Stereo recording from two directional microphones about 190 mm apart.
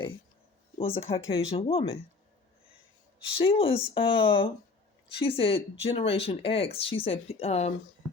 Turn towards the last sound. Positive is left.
turn(degrees=35)  # may be behind; listen again after turning